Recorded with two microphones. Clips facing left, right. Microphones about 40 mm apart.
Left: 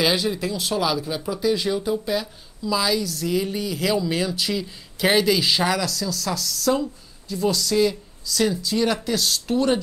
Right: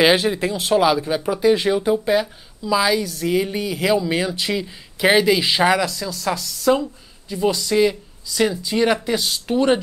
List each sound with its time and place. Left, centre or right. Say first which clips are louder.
0.0 s speech: right 6 dB; right
2.6 s speech: right 4 dB; right